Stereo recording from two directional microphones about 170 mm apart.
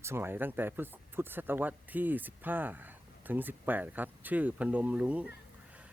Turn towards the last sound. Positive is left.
turn(degrees=-5)  # may be behind; listen again after turning